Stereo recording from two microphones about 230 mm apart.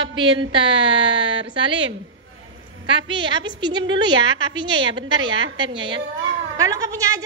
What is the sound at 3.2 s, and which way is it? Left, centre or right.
A woman's voice, centre.